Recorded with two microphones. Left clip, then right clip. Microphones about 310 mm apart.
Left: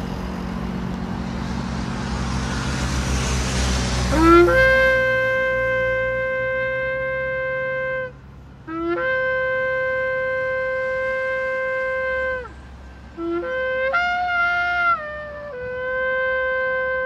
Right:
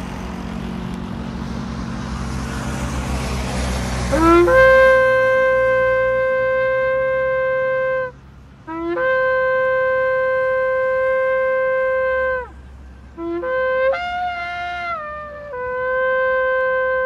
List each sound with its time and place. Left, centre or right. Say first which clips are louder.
3.5 s vehicle: left 1 dB; right
4.5 s shofar: right 5 dB; centre
13.4 s music: right 5 dB; centre
15.8 s shofar: right 4 dB; centre